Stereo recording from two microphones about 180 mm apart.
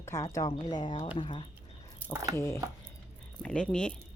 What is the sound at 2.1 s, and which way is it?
Speech, 20° right (ahead or behind).